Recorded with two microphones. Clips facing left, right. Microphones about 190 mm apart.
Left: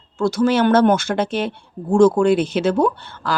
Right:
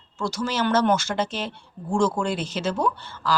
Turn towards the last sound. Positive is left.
turn(degrees=60)  # may be behind; listen again after turning